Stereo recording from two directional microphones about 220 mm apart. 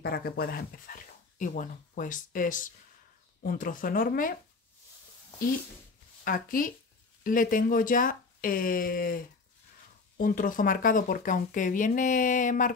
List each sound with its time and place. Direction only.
0.0 s speech: 45° left (ahead or behind)
6.2 s speech: 40° left (ahead or behind)